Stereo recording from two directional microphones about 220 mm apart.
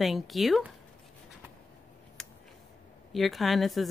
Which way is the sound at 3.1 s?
Centre (ahead or behind).